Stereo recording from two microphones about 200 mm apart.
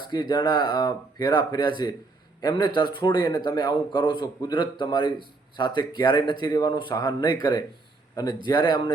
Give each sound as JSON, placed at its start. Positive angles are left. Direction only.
{"t": 0.1, "sound": "speech", "side_deg": 20}